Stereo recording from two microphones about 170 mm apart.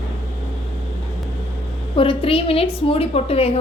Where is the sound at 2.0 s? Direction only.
30° left (ahead or behind).